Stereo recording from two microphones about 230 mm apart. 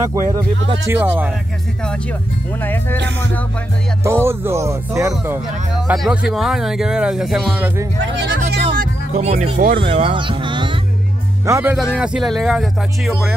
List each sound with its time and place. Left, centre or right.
0.1 s speech: centre
2.6 s speech: centre
4.0 s speech: centre
8.0 s speech: right
8.7 s speech: right; by 13.4 s centre